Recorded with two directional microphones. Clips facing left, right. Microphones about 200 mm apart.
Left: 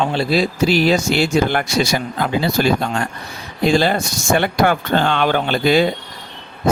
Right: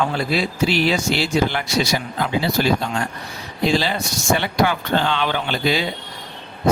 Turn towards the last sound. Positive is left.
turn(degrees=50)  # may be behind; listen again after turning